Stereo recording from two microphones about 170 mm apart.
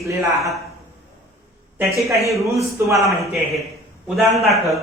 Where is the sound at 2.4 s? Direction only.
15° right (ahead or behind).